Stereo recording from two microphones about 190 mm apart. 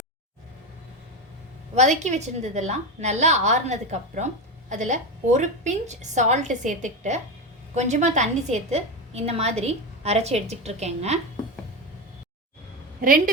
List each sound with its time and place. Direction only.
1.7 s a woman's voice: 40° right (ahead or behind)
13.0 s a woman's voice: 45° right (ahead or behind)